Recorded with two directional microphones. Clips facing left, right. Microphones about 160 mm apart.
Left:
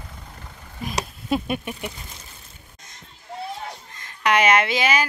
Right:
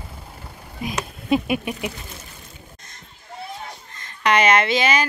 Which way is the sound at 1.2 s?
5° right (ahead or behind).